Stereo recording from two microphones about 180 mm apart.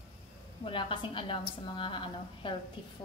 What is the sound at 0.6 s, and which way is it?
A woman's voice, 30° left (ahead or behind).